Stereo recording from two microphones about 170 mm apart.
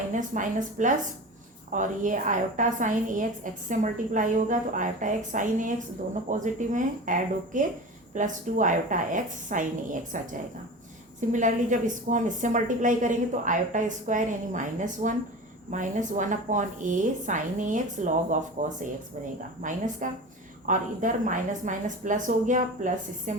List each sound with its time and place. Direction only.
0.1 s a woman's voice: 50° right (ahead or behind)
11.3 s a woman's voice: 45° right (ahead or behind)